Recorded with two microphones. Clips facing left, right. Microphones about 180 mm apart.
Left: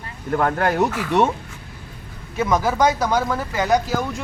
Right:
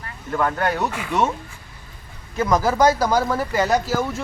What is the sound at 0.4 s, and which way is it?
Speech, 40° left (ahead or behind).